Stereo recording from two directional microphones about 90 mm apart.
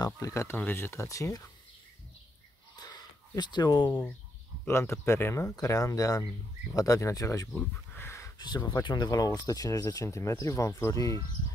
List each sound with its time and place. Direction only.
0.0 s speech: 35° left (ahead or behind)
1.0 s speech: 35° left (ahead or behind)
2.7 s a sound: 50° left (ahead or behind)
4.6 s speech: 30° left (ahead or behind)
7.5 s a sound: 25° left (ahead or behind)
8.4 s speech: 50° left (ahead or behind); by 11.1 s 35° left (ahead or behind)